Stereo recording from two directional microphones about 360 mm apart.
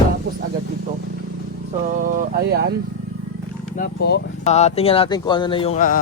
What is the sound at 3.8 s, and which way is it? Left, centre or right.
Speech, left.